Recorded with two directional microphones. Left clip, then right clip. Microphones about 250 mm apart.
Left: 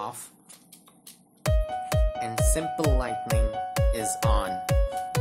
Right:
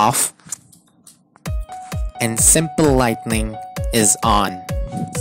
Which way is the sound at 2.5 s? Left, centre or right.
Right.